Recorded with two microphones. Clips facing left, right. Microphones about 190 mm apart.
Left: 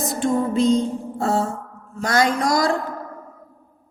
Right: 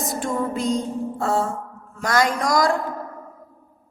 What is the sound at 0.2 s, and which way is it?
Speech, 25° left (ahead or behind).